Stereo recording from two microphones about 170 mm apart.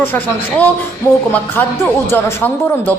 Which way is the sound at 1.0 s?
15° left (ahead or behind).